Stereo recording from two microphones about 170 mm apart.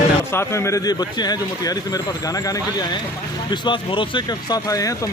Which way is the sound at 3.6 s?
30° left (ahead or behind).